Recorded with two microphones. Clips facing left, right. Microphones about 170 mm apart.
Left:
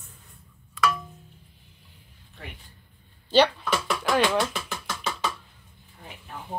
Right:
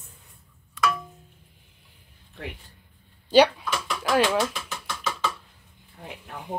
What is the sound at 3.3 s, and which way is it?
Speech, 10° right (ahead or behind).